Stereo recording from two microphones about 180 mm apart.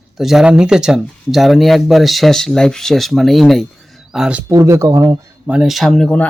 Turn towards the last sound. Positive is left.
turn(degrees=5)  # may be behind; listen again after turning